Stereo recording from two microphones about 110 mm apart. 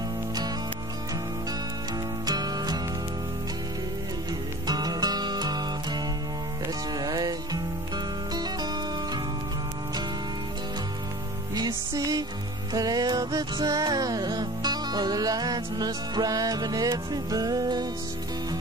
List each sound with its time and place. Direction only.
2.2 s music: 35° right (ahead or behind)
4.6 s music: 40° right (ahead or behind)
11.5 s music: 40° right (ahead or behind)